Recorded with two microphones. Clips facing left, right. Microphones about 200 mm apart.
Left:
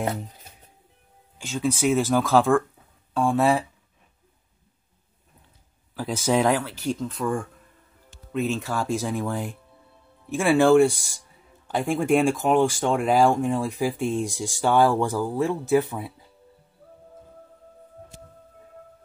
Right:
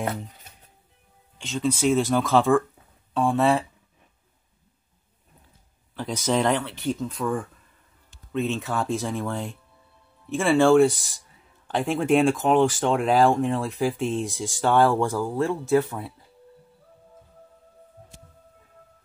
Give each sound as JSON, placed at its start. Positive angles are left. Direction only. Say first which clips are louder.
{"t": 1.4, "sound": "speech", "louder": "even", "side_deg": 10}
{"t": 5.9, "sound": "speech", "louder": "left 2 dB", "side_deg": 5}
{"t": 15.3, "sound": "speech", "louder": "even", "side_deg": 15}